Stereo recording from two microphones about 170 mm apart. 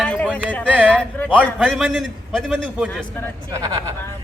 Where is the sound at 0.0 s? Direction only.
10° left (ahead or behind).